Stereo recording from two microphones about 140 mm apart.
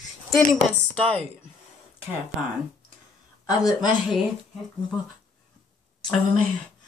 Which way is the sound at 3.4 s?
25° left (ahead or behind).